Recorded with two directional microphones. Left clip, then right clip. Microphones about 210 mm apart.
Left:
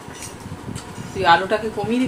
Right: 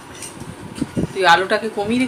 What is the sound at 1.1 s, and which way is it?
Speech, 20° right (ahead or behind).